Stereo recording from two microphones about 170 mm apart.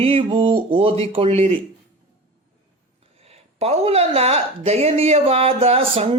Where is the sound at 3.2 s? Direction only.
35° right (ahead or behind).